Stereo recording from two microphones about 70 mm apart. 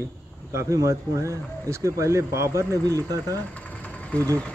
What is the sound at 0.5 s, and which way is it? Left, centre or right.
Speech, right.